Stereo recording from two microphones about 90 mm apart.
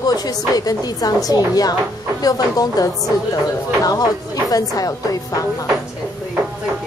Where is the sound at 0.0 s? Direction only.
45° left (ahead or behind).